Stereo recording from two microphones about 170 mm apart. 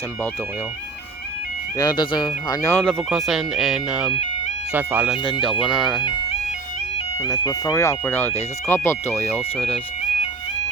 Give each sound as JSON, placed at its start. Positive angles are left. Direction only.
{"t": 1.8, "sound": "speech", "side_deg": 25}
{"t": 2.8, "sound": "speech", "side_deg": 0}
{"t": 4.1, "sound": "music", "side_deg": 40}
{"t": 4.7, "sound": "speech", "side_deg": -10}
{"t": 6.0, "sound": "speech", "side_deg": 30}
{"t": 9.7, "sound": "music", "side_deg": 45}